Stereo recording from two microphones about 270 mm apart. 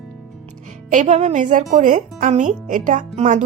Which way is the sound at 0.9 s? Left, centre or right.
Right.